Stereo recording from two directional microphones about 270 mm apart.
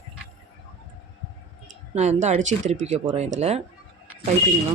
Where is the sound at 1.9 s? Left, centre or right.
Right.